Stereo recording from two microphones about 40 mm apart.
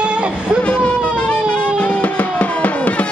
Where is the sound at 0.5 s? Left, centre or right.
Left.